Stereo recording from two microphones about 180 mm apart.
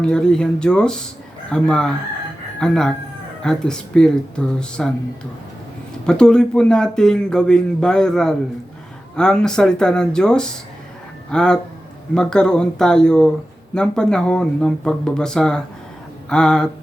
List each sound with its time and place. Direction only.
0.0 s a man's voice: 5° left (ahead or behind)